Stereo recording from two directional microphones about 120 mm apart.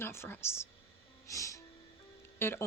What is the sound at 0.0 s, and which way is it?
Speech, 20° left (ahead or behind).